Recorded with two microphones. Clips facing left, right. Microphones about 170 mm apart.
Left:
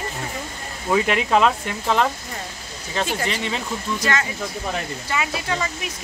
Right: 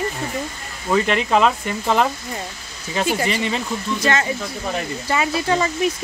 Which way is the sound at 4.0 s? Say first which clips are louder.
Right 5 dB; 25° right (ahead or behind).